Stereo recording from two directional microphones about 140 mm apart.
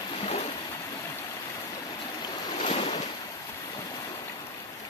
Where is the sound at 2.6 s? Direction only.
50° left (ahead or behind).